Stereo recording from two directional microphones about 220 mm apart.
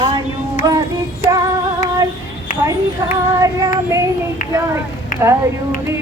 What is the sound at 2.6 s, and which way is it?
Child singing, 15° right (ahead or behind).